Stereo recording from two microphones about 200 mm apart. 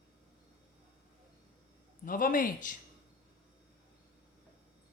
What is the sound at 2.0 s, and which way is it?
Speech, 45° left (ahead or behind).